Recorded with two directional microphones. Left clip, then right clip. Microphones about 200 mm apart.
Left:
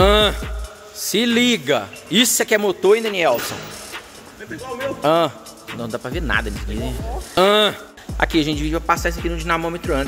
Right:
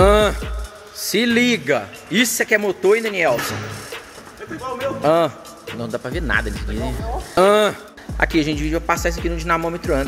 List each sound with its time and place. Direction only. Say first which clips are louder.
0.0 s music: right 1 dB; 5° right (ahead or behind)
0.9 s a man's voice: right 1 dB; centre (ahead or behind)
4.7 s a man's voice: even; centre (ahead or behind)